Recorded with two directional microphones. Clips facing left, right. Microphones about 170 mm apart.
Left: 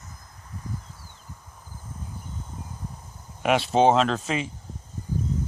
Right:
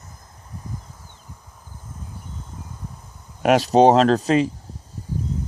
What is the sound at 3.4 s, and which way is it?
Speech, 40° right (ahead or behind).